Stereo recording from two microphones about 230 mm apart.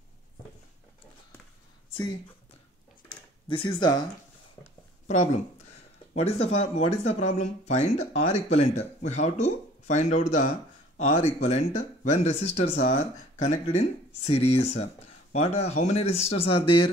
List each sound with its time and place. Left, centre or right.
3.4 s speech: left
5.0 s speech: left